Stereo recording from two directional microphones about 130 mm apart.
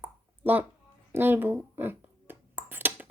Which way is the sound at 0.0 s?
15° right (ahead or behind).